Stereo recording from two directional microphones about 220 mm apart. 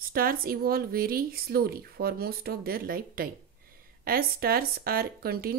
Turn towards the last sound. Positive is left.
turn(degrees=-45)  # may be behind; listen again after turning